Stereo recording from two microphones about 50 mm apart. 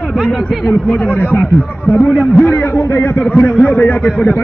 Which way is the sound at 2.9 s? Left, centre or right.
Left.